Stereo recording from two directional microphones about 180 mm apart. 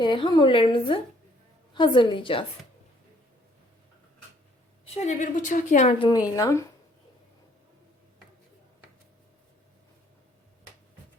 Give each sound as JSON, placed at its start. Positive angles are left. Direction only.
{"t": 0.0, "sound": "a woman's voice", "side_deg": 25}
{"t": 4.9, "sound": "a woman's voice", "side_deg": 40}
{"t": 6.1, "sound": "a woman's voice", "side_deg": 20}